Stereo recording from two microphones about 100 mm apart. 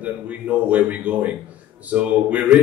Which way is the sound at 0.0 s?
15° right (ahead or behind).